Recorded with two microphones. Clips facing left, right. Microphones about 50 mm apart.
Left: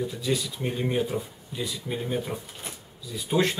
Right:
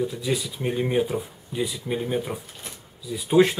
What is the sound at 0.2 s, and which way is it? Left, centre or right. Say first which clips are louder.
Speech: right 1 dB; centre.